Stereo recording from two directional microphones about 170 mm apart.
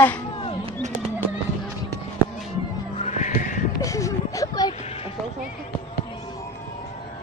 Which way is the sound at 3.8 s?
20° left (ahead or behind).